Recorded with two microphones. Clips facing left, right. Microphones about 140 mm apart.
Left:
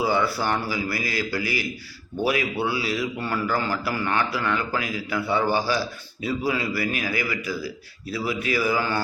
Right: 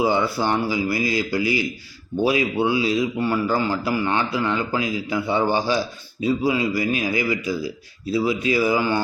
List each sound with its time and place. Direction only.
0.0 s a man's voice: 20° right (ahead or behind)